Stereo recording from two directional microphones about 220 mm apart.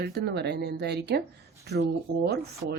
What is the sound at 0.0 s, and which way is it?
A woman's voice, 45° right (ahead or behind).